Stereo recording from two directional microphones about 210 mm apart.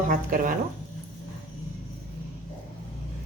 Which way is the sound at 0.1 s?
40° right (ahead or behind).